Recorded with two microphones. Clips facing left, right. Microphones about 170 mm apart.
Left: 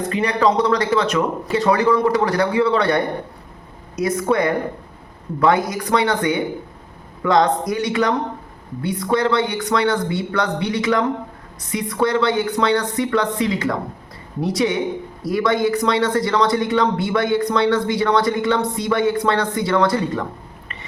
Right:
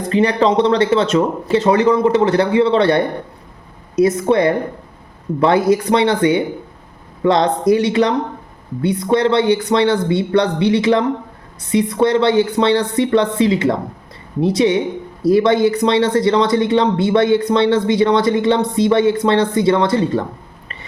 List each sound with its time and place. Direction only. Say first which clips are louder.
0.1 s a man's voice: right 5 dB; 30° right (ahead or behind)